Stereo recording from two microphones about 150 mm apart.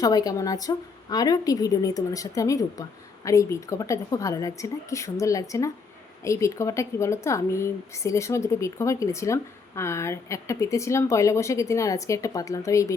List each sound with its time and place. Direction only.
0.0 s speech: 25° left (ahead or behind)